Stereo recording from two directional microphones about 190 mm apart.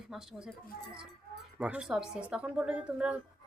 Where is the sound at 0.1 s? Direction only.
5° right (ahead or behind).